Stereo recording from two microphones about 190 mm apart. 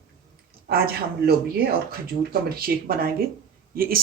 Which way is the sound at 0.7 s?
55° right (ahead or behind).